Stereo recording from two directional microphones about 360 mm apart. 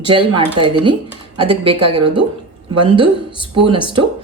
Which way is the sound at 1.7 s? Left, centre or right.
Right.